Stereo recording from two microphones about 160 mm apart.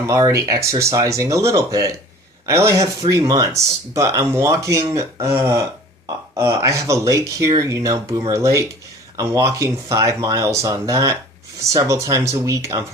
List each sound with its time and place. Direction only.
0.1 s speech: 20° right (ahead or behind)